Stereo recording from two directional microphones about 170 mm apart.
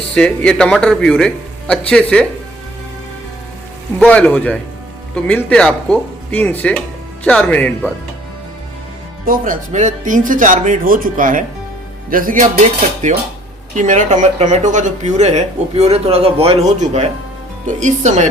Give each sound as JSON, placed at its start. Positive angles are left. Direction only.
{"t": 0.1, "sound": "speech", "side_deg": 5}
{"t": 4.0, "sound": "speech", "side_deg": 5}
{"t": 9.2, "sound": "speech", "side_deg": -55}